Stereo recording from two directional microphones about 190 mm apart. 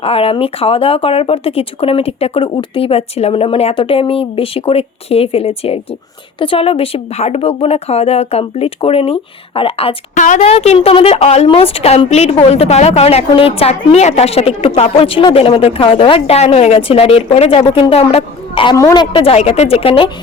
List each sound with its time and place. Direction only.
0.0 s a woman's voice: 30° left (ahead or behind)
10.2 s a woman's voice: 40° left (ahead or behind)